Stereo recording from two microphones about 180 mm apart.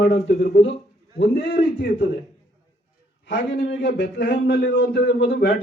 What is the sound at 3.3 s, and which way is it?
Speech, 90° left.